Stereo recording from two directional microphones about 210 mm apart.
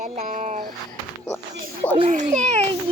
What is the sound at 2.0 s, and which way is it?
Speech, 35° right (ahead or behind).